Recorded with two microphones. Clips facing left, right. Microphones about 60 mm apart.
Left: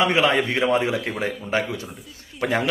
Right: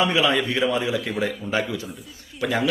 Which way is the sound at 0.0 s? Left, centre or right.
Left.